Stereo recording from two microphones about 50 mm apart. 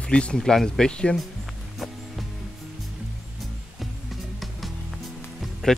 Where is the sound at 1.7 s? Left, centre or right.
Centre.